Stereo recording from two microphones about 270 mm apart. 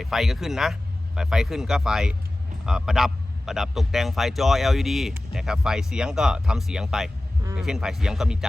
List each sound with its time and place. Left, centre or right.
0.0 s a man's voice: centre